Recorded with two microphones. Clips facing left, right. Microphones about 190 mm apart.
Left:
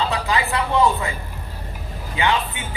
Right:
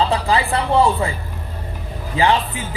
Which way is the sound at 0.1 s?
30° right (ahead or behind).